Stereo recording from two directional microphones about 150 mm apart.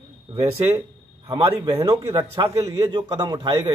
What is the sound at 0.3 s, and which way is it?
Speech, 20° right (ahead or behind).